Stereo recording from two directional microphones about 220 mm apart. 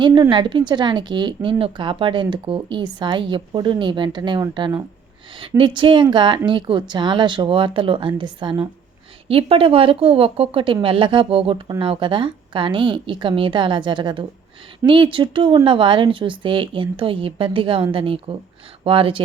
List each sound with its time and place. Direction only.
0.0 s speech: 20° right (ahead or behind)